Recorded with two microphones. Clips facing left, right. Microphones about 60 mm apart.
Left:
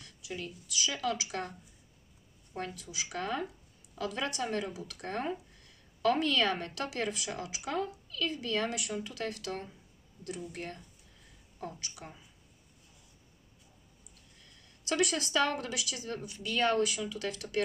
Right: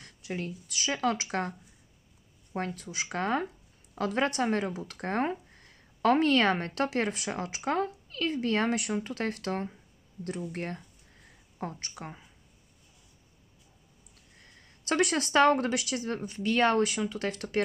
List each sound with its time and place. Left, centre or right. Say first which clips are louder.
0.0 s a sound: right 5 dB; right
0.7 s speech: right 4 dB; right
2.5 s speech: right 5 dB; right
4.6 s speech: right 6 dB; right
14.4 s a sound: right 2 dB; right
15.0 s speech: right 6 dB; right